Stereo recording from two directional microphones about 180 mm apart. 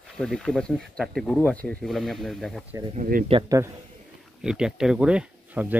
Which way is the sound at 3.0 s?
50° right (ahead or behind).